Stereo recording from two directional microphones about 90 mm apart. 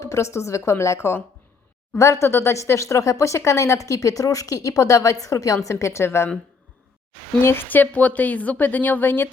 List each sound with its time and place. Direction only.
0.0 s a woman's voice: 35° left (ahead or behind)
7.4 s a woman's voice: 25° left (ahead or behind)